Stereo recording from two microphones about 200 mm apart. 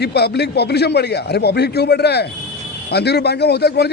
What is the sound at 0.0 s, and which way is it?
A man's voice, 55° left (ahead or behind).